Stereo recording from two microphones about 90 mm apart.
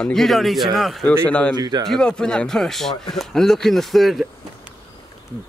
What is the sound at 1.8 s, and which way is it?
Speech, 5° left (ahead or behind).